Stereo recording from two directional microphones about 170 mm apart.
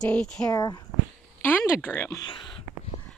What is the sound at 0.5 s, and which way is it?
Speech, 25° left (ahead or behind).